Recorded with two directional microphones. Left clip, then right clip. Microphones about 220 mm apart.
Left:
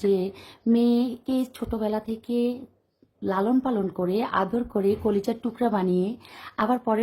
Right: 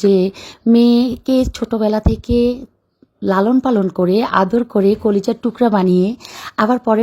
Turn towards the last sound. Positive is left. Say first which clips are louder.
# right 9 dB
turn(degrees=-25)  # may be behind; listen again after turning